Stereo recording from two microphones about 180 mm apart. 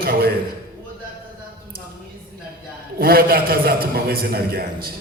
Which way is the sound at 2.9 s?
55° right (ahead or behind).